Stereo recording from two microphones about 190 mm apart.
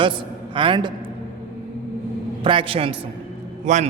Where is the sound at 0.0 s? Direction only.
25° right (ahead or behind).